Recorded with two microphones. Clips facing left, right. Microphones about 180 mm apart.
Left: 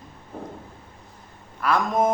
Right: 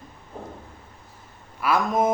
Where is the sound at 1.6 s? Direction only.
5° right (ahead or behind).